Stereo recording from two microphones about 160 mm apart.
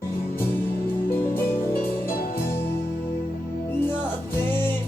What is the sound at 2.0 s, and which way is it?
Music, 65° left (ahead or behind).